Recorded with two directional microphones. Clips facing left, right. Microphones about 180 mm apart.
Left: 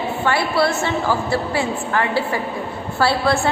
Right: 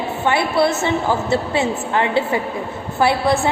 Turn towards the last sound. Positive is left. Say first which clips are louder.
# right 1 dB
turn(degrees=-20)  # may be behind; listen again after turning